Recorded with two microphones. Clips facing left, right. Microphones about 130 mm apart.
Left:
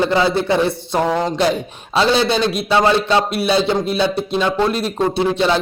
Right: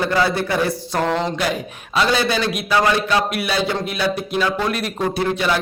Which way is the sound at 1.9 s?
25° left (ahead or behind).